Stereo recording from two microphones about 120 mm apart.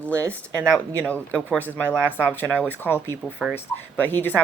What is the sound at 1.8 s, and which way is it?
Speech, 20° right (ahead or behind).